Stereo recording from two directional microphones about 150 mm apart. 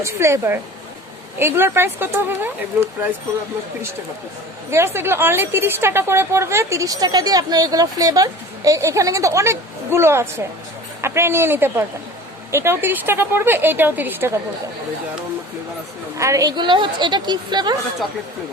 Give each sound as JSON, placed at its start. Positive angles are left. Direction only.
{"t": 0.0, "sound": "a woman's voice", "side_deg": -20}
{"t": 4.9, "sound": "a woman's voice", "side_deg": -15}
{"t": 16.1, "sound": "a woman's voice", "side_deg": -20}